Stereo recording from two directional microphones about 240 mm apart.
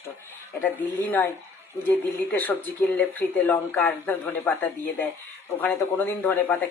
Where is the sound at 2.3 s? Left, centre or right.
Centre.